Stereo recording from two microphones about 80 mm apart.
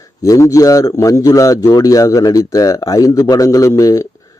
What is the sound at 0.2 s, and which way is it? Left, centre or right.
Speech, left.